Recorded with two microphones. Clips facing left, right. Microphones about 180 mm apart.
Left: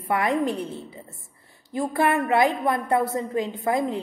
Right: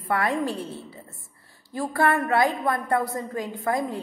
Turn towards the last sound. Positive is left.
turn(degrees=20)  # may be behind; listen again after turning